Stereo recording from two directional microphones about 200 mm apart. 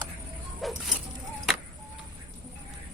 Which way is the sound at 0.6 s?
Centre (ahead or behind).